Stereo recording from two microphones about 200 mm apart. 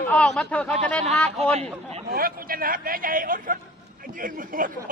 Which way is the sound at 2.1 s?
45° right (ahead or behind).